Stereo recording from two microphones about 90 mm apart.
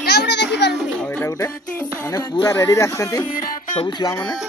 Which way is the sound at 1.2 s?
35° left (ahead or behind).